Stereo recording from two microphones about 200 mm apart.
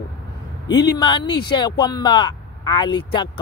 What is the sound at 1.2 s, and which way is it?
Speech, 55° left (ahead or behind).